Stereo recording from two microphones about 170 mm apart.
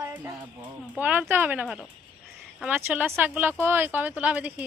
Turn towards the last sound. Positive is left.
turn(degrees=-10)  # may be behind; listen again after turning